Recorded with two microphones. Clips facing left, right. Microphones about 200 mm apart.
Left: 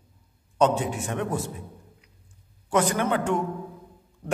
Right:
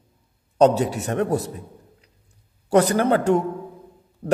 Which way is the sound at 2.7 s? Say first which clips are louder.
Right 6 dB; 35° right (ahead or behind).